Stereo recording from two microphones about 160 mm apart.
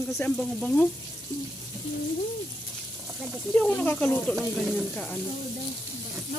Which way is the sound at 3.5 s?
10° left (ahead or behind).